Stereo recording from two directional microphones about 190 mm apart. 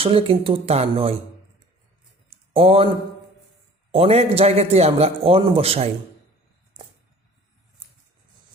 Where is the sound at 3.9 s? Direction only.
30° right (ahead or behind).